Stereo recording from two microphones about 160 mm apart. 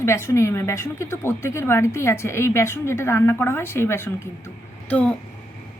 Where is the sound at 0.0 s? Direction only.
15° left (ahead or behind).